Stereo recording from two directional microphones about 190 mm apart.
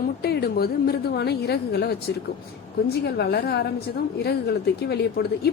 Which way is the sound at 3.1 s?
60° left (ahead or behind).